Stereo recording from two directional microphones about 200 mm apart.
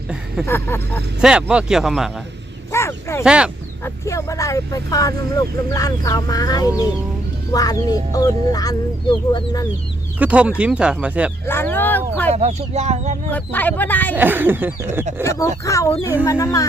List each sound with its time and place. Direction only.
0.4 s speech: 10° left (ahead or behind)
1.2 s speech: 5° right (ahead or behind)
2.7 s a sound: 15° left (ahead or behind)
3.2 s speech: 5° right (ahead or behind)
3.8 s speech: 15° left (ahead or behind)
10.2 s a sound: 5° right (ahead or behind)
10.6 s speech: 5° right (ahead or behind)
11.4 s speech: 10° left (ahead or behind)
12.3 s speech: 35° right (ahead or behind)
13.3 s speech: 10° left (ahead or behind)
14.2 s a sound: 10° right (ahead or behind)
15.2 s speech: 15° left (ahead or behind)